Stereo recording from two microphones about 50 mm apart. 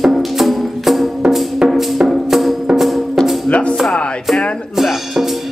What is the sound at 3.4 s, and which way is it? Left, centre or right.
Music, left.